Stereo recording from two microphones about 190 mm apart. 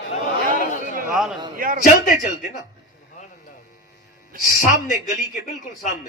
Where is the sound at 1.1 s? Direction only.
5° right (ahead or behind).